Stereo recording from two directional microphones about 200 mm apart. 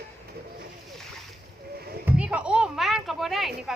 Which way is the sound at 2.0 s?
5° right (ahead or behind).